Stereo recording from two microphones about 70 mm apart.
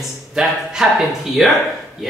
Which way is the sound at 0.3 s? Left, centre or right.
Centre.